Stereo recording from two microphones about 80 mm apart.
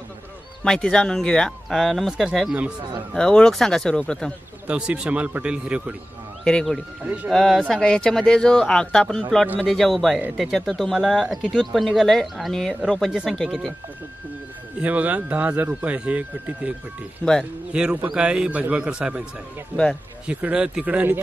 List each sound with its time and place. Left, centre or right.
0.7 s speech: centre
3.2 s speech: centre
4.6 s speech: centre
6.4 s speech: centre
14.8 s speech: centre
17.2 s speech: centre
17.7 s speech: centre
20.2 s speech: centre